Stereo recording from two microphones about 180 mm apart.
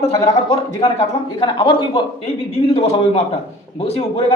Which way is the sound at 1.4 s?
30° left (ahead or behind).